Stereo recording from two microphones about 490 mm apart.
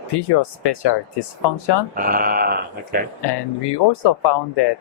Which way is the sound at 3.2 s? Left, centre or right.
Left.